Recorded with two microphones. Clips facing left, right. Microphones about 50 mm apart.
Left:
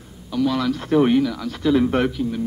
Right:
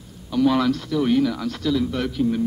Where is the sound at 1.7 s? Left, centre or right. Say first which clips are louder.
Left 6 dB; left.